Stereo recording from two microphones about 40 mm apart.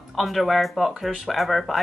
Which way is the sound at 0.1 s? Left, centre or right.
Centre.